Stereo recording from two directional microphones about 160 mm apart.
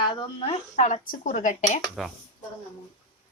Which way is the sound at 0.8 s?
50° left (ahead or behind).